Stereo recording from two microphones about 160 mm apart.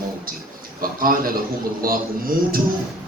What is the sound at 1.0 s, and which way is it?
A man's voice, 60° right (ahead or behind).